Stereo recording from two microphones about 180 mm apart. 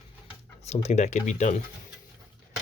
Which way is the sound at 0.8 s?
40° left (ahead or behind).